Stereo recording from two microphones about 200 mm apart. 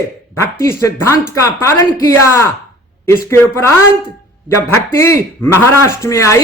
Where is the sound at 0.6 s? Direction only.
15° left (ahead or behind).